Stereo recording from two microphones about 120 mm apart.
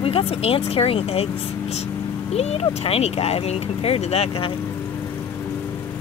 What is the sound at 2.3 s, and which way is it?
Speech, 55° left (ahead or behind).